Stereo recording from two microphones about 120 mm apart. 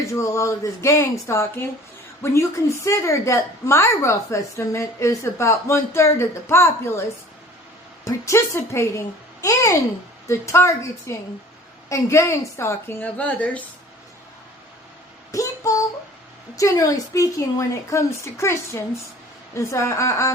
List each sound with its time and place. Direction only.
0.0 s a woman's voice: 25° left (ahead or behind)
8.0 s a woman's voice: 25° left (ahead or behind)
15.3 s a sound: 25° left (ahead or behind)
16.6 s a woman's voice: 30° left (ahead or behind)